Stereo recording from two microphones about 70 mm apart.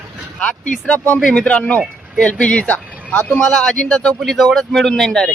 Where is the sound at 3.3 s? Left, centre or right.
Centre.